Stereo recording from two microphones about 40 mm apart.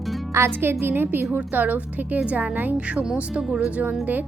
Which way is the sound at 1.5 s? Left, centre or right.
Right.